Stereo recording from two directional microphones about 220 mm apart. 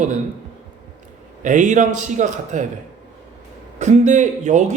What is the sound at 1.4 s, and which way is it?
Speech, 35° right (ahead or behind).